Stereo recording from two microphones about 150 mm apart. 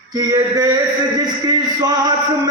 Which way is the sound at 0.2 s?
25° right (ahead or behind).